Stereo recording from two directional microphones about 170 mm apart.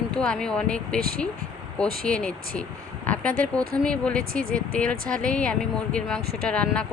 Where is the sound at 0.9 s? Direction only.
60° right (ahead or behind).